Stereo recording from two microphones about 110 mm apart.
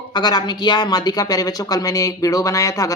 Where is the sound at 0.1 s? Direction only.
40° left (ahead or behind).